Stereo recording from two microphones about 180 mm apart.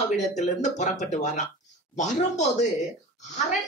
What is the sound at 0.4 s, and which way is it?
Speech, 40° left (ahead or behind).